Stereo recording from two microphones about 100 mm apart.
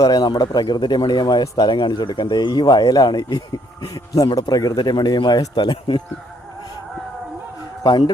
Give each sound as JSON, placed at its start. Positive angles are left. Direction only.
{"t": 0.0, "sound": "speech", "side_deg": 45}
{"t": 7.9, "sound": "speech", "side_deg": 45}